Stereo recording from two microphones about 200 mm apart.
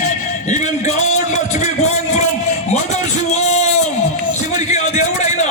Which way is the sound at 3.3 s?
35° left (ahead or behind).